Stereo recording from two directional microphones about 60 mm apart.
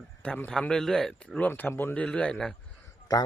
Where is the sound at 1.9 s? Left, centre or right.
Left.